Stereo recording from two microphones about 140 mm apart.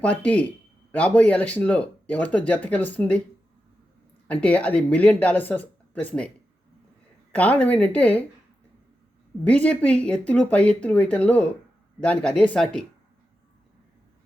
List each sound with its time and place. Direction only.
0.0 s speech: 10° left (ahead or behind)
4.3 s speech: 10° left (ahead or behind)
7.3 s speech: 10° left (ahead or behind)
9.4 s speech: 10° left (ahead or behind)